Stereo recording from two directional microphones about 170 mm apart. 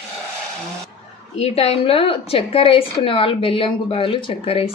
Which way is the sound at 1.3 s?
40° left (ahead or behind).